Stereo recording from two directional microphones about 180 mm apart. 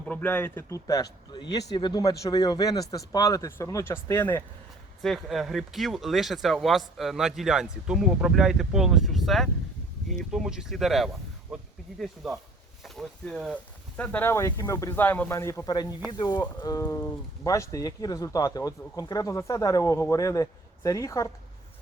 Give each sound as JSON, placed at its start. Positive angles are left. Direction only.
{"t": 0.0, "sound": "speech", "side_deg": 10}
{"t": 5.0, "sound": "speech", "side_deg": 0}
{"t": 16.8, "sound": "speech", "side_deg": 10}